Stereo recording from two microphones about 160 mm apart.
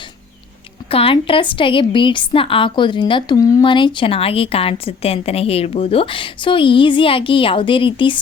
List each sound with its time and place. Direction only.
0.9 s a woman's voice: 35° left (ahead or behind)